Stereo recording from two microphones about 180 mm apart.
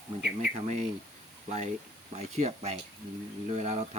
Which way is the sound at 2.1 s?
40° right (ahead or behind).